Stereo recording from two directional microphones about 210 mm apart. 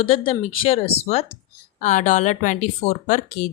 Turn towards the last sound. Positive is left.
turn(degrees=35)  # may be behind; listen again after turning